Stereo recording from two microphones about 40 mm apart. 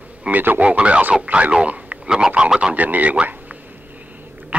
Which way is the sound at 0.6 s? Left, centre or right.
Right.